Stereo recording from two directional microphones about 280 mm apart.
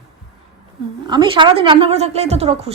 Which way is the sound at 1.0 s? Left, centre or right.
Centre.